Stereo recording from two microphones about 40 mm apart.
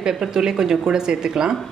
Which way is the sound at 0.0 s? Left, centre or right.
Centre.